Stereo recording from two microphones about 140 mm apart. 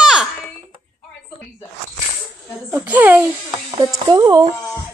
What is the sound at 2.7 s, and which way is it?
Speech, 10° right (ahead or behind).